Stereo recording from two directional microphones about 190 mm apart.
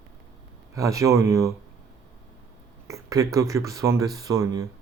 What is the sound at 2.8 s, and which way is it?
Speech, 15° right (ahead or behind).